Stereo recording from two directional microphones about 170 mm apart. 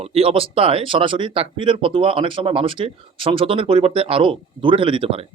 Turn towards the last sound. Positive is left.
turn(degrees=-35)  # may be behind; listen again after turning